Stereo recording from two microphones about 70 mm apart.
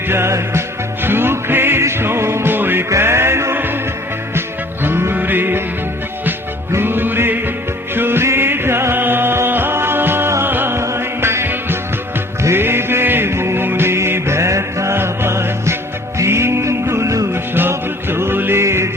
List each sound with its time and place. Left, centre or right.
0.1 s music: right
6.7 s music: right
17.5 s music: right